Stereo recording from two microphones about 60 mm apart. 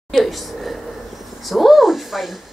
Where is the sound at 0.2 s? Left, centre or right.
Centre.